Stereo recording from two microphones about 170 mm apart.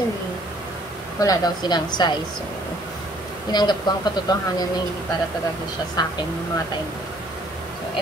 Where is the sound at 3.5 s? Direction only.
25° left (ahead or behind).